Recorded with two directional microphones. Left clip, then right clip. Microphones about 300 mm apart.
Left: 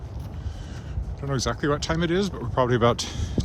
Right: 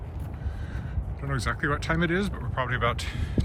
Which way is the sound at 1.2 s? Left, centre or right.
Centre.